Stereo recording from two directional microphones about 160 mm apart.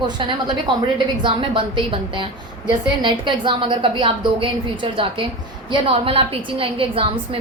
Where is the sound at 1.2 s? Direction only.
35° right (ahead or behind).